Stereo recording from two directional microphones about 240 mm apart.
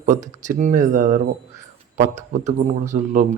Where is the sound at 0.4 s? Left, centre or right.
Right.